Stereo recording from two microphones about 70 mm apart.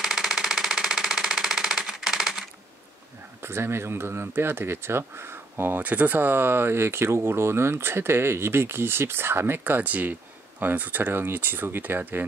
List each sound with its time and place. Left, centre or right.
0.0 s engine: centre
3.4 s speech: right